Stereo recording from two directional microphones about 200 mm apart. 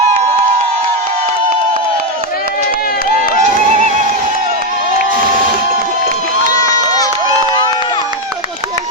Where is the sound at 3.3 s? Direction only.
35° right (ahead or behind).